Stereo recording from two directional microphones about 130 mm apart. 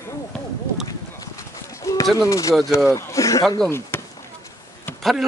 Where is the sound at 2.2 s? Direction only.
25° left (ahead or behind).